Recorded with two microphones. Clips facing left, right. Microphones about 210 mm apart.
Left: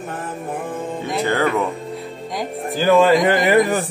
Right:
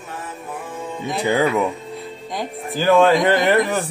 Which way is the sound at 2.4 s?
Centre (ahead or behind).